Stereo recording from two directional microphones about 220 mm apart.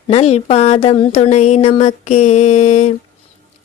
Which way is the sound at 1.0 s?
30° left (ahead or behind).